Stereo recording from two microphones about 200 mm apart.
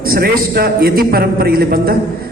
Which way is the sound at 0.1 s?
50° right (ahead or behind).